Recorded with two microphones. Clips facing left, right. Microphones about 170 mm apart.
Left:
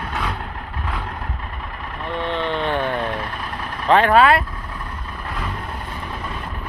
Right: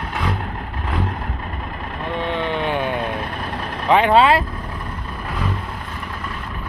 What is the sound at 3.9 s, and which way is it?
Speech, 15° right (ahead or behind).